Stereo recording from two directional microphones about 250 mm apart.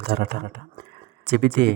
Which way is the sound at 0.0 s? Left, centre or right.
Right.